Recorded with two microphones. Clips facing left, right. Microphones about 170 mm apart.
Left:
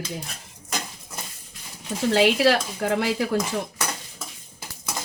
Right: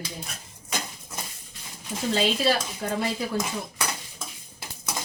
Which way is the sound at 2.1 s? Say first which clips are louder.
Left 5 dB; 85° left.